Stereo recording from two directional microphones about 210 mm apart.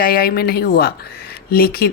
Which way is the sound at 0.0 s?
45° left (ahead or behind).